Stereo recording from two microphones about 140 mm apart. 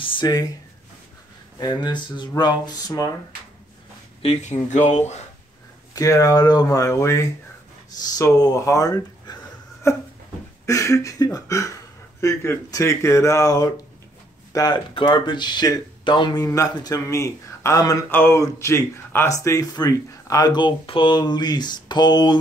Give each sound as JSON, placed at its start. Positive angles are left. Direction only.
{"t": 0.0, "sound": "speech", "side_deg": 35}
{"t": 1.6, "sound": "speech", "side_deg": 30}
{"t": 4.2, "sound": "speech", "side_deg": 50}
{"t": 5.9, "sound": "speech", "side_deg": 25}